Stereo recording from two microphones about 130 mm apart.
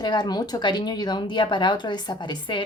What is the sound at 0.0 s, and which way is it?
A woman's voice, 35° left (ahead or behind).